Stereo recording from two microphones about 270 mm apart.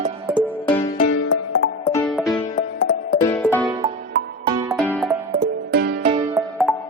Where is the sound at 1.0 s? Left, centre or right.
Left.